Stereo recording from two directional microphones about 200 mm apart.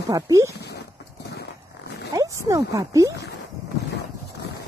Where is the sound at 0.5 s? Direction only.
55° left (ahead or behind).